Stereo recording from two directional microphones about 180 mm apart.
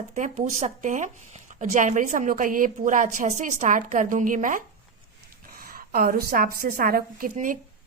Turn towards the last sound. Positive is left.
turn(degrees=-50)  # may be behind; listen again after turning